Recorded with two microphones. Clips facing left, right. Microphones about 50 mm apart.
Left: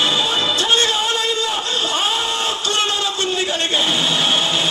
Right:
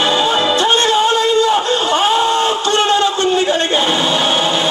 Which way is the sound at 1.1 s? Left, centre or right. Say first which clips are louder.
Right 8 dB; right.